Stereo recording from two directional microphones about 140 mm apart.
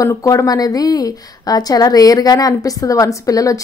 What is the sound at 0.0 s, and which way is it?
A woman's voice, 20° left (ahead or behind).